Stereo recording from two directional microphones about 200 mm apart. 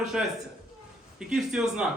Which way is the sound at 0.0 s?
Centre (ahead or behind).